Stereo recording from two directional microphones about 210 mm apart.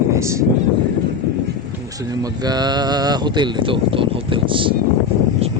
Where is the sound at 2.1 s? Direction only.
20° right (ahead or behind).